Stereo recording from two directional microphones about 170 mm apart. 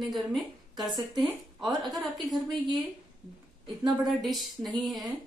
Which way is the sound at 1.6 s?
25° right (ahead or behind).